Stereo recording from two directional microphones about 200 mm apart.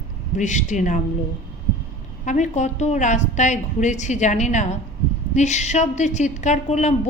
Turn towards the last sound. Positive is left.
turn(degrees=35)  # may be behind; listen again after turning